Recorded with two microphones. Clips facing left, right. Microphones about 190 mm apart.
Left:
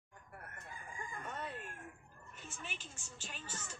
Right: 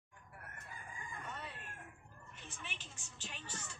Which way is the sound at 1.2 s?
50° left (ahead or behind).